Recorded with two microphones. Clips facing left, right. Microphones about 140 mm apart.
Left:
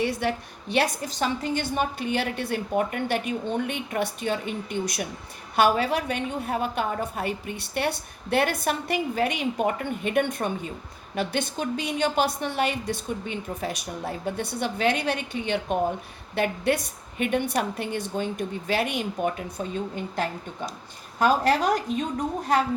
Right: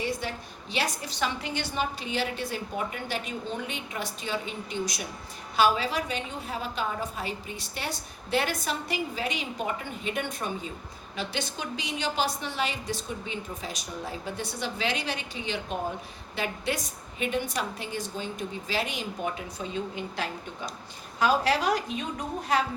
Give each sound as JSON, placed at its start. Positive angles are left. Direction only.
{"t": 0.0, "sound": "a woman's voice", "side_deg": 65}